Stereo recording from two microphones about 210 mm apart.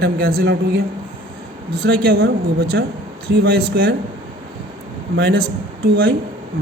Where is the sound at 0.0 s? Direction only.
45° right (ahead or behind).